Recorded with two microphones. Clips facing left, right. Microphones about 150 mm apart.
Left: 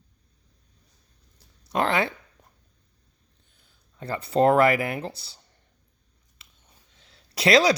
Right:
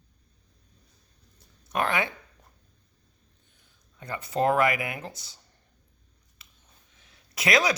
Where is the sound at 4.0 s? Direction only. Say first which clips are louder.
Left 5 dB; 30° left (ahead or behind).